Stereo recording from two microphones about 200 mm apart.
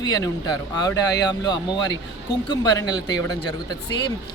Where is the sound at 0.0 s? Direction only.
20° left (ahead or behind).